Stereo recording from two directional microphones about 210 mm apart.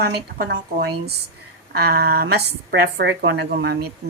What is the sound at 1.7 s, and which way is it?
A woman's voice, 45° right (ahead or behind).